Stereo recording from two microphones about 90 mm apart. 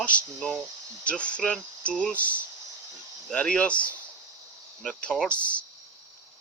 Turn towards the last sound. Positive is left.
turn(degrees=15)  # may be behind; listen again after turning